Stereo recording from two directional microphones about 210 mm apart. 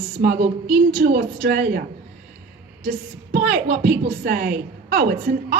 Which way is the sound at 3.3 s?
50° right (ahead or behind).